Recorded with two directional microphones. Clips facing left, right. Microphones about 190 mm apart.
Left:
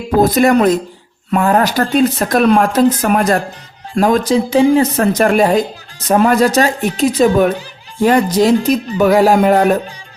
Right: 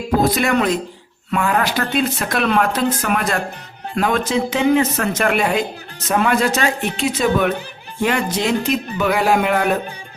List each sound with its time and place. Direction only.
0.3 s speech: 40° left (ahead or behind)